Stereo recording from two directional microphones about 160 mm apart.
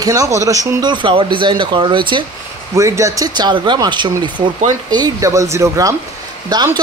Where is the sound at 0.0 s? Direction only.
20° right (ahead or behind).